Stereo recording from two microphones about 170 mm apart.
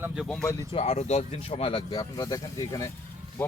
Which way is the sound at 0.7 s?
35° left (ahead or behind).